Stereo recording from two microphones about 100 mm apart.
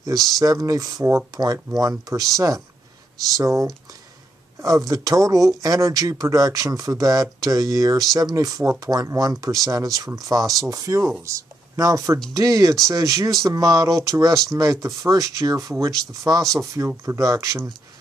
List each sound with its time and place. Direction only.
0.0 s speech: 35° right (ahead or behind)